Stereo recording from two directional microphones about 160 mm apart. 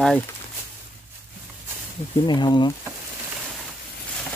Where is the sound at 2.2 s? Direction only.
25° left (ahead or behind).